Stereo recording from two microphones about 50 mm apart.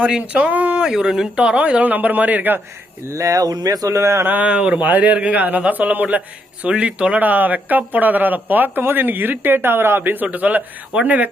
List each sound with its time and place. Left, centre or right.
0.2 s speech: right
0.9 s speech: centre
1.5 s speech: right
3.1 s speech: right
4.4 s speech: right
6.7 s speech: right